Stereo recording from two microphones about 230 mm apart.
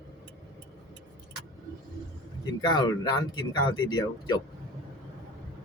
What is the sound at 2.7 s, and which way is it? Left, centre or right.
Speech, centre.